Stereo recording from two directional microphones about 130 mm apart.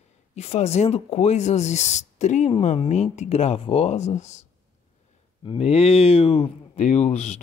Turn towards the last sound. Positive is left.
turn(degrees=60)  # may be behind; listen again after turning